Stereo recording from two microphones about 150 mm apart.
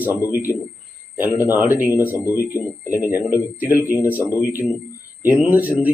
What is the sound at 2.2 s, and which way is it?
Speech, 20° left (ahead or behind).